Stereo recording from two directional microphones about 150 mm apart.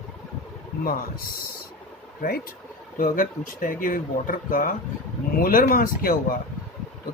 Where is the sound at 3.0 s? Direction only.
65° left (ahead or behind).